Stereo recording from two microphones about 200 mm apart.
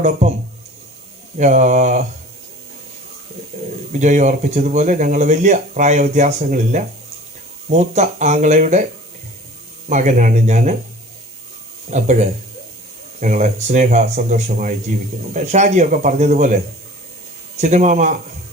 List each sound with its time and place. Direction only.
1.4 s speech: 35° right (ahead or behind)
3.9 s speech: 35° right (ahead or behind)
9.9 s speech: 35° right (ahead or behind)
11.9 s speech: 35° right (ahead or behind)
17.6 s speech: 35° right (ahead or behind)